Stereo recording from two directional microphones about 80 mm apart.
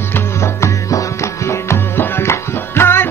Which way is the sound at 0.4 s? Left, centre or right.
Left.